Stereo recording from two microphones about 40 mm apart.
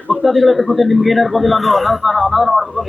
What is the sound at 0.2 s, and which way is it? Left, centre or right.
Speech, centre.